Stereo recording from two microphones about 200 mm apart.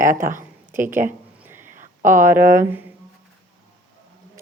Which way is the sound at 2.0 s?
40° right (ahead or behind).